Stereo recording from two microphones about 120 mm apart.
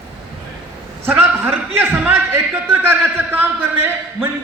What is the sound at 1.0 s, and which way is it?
A man's voice, 20° right (ahead or behind).